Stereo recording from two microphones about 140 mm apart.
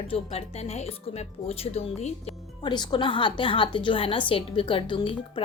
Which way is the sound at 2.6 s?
30° left (ahead or behind).